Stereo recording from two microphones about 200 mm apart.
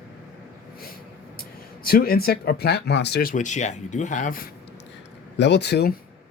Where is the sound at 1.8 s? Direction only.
45° left (ahead or behind).